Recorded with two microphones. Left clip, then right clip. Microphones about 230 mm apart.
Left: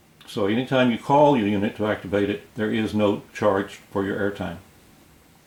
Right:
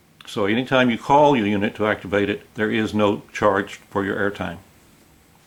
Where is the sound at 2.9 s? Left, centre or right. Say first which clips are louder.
Right 1 dB; left.